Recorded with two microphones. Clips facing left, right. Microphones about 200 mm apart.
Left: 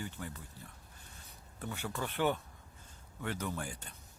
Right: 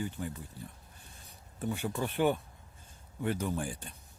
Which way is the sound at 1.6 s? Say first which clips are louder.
Right 6 dB; 15° right (ahead or behind).